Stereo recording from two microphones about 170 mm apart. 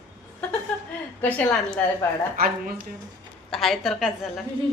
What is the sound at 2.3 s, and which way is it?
Speech, 55° right (ahead or behind).